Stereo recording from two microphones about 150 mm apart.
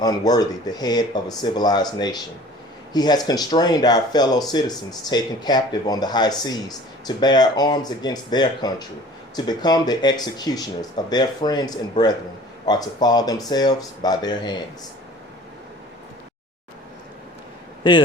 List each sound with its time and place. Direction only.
0.0 s speech: 25° left (ahead or behind)